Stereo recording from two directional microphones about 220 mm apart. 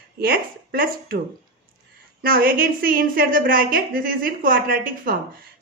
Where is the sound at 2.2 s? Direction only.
40° right (ahead or behind).